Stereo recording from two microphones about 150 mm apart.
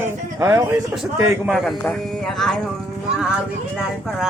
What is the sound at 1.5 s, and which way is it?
Speech, centre (ahead or behind).